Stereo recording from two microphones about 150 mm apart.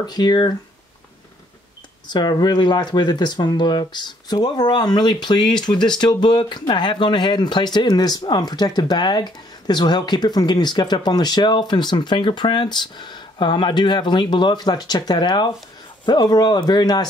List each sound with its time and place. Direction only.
0.0 s speech: 25° left (ahead or behind)
2.0 s speech: 30° left (ahead or behind)